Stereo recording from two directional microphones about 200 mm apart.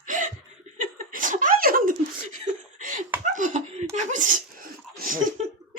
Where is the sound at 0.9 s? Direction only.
45° right (ahead or behind).